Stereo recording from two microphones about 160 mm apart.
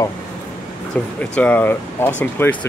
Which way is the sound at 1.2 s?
10° left (ahead or behind).